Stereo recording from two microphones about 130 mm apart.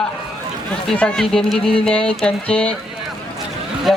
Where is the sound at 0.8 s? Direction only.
5° left (ahead or behind).